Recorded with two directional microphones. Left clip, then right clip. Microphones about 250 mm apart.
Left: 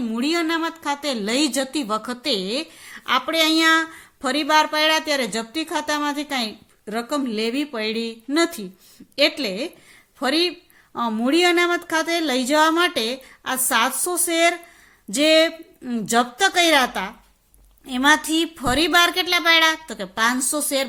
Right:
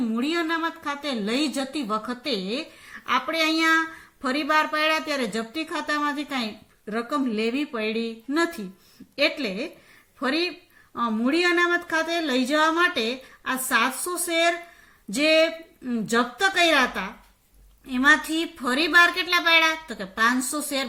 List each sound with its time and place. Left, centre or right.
0.1 s speech: left